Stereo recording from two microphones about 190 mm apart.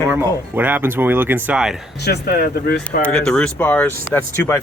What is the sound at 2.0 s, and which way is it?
Speech, 55° left (ahead or behind).